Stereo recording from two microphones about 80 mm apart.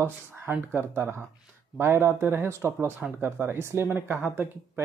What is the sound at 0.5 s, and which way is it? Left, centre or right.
Speech, right.